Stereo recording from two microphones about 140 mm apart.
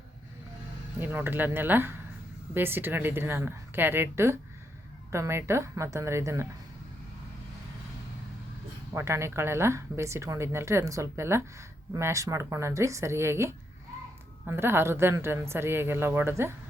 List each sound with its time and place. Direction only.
0.9 s a woman's voice: 15° right (ahead or behind)
8.9 s a woman's voice: 20° right (ahead or behind)